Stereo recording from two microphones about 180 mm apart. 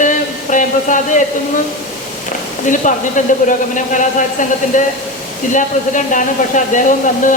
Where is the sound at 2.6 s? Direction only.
45° left (ahead or behind).